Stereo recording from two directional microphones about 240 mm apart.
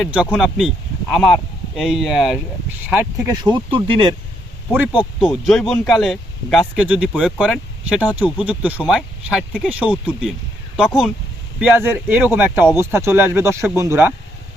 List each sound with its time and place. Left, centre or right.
0.0 s speech: centre
3.4 s speech: centre
4.7 s speech: centre
11.6 s speech: centre